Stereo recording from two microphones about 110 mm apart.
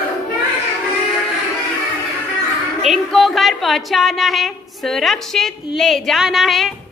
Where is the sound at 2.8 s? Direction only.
Centre (ahead or behind).